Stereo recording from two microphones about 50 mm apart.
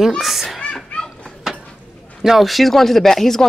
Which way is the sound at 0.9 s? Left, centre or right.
Left.